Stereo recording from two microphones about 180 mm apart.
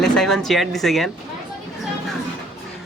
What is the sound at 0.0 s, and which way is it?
Speech, centre (ahead or behind).